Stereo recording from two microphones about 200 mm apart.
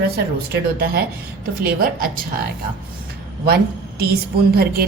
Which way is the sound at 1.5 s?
45° right (ahead or behind).